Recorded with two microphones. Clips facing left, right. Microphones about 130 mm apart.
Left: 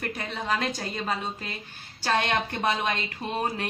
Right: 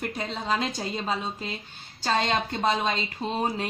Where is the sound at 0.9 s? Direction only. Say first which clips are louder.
Right 1 dB; 5° right (ahead or behind).